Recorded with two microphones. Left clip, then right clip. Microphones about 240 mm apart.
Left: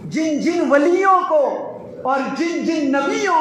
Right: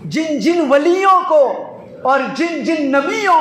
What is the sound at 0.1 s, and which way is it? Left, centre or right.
A man's voice, right.